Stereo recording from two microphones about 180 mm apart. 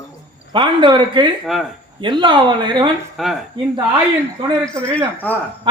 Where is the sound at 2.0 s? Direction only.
25° right (ahead or behind).